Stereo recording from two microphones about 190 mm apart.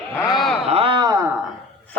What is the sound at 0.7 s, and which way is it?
Speech, 30° right (ahead or behind).